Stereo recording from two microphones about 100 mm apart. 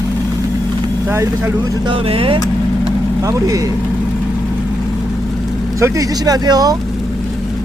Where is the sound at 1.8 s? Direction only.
65° right (ahead or behind).